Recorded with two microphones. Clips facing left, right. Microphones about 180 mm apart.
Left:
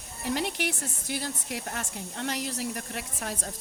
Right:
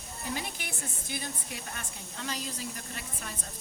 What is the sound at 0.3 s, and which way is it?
Speech, 70° left (ahead or behind).